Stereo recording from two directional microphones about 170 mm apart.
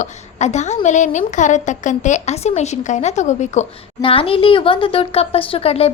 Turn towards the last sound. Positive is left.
turn(degrees=35)  # may be behind; listen again after turning